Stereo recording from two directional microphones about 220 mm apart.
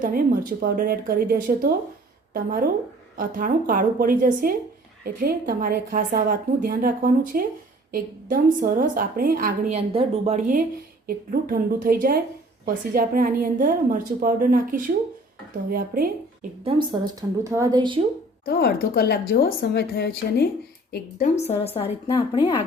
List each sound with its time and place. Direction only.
0.0 s a woman's voice: 40° right (ahead or behind)
9.7 s a woman's voice: 30° right (ahead or behind)
16.6 s a woman's voice: 20° right (ahead or behind)
18.4 s a woman's voice: 45° left (ahead or behind)
21.3 s a woman's voice: 30° left (ahead or behind)